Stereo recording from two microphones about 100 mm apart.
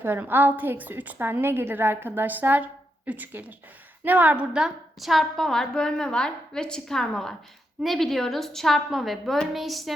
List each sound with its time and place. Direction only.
0.0 s a woman's voice: 20° right (ahead or behind); by 9.9 s centre (ahead or behind)